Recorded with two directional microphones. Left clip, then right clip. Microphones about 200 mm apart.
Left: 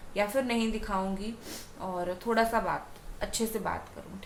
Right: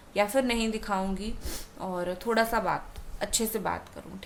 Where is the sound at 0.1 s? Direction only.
55° right (ahead or behind).